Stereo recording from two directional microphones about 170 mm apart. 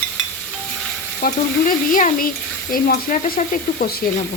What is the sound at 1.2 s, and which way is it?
Sizzle, 55° left (ahead or behind).